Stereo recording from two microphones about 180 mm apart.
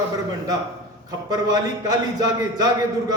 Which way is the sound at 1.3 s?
20° right (ahead or behind).